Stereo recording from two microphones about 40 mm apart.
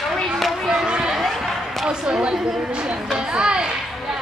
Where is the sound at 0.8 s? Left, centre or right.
Right.